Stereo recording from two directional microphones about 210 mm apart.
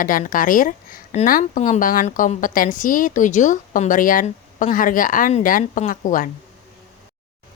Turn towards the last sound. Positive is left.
turn(degrees=40)  # may be behind; listen again after turning